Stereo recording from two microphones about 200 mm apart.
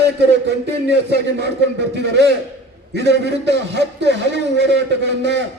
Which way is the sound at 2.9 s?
60° right (ahead or behind).